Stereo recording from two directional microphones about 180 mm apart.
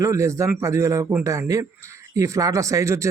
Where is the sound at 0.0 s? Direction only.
15° right (ahead or behind).